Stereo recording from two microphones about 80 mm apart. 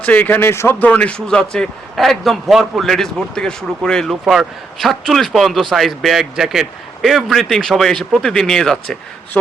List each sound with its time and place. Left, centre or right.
0.0 s speech: centre
0.8 s speech: centre
2.0 s speech: centre